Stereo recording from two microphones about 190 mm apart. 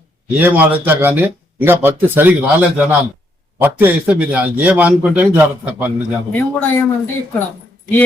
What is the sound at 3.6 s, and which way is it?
A man's voice, 10° right (ahead or behind).